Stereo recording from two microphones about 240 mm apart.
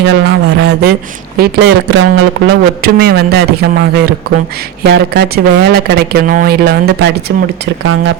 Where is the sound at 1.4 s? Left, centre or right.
Right.